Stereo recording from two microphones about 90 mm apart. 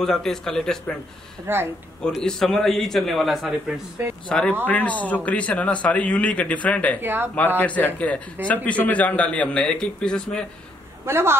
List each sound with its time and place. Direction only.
0.0 s a man's voice: 5° left (ahead or behind)
1.5 s speech: 25° right (ahead or behind)
2.0 s a man's voice: 5° left (ahead or behind)
4.3 s a man's voice: 10° left (ahead or behind)
7.0 s speech: 25° right (ahead or behind)
7.3 s a man's voice: 15° left (ahead or behind)
11.1 s speech: 30° right (ahead or behind)